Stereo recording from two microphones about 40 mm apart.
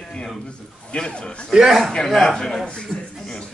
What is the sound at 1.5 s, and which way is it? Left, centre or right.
Speech, centre.